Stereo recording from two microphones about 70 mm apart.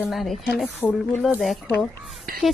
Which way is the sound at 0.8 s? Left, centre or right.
Left.